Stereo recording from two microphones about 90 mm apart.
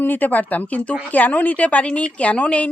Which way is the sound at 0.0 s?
20° left (ahead or behind).